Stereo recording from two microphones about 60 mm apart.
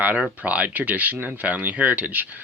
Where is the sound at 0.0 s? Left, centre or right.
Right.